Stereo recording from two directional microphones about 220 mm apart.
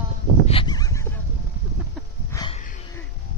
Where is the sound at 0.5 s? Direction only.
20° left (ahead or behind).